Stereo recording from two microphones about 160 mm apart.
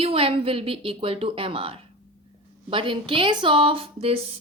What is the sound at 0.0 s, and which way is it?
Speech, 35° right (ahead or behind).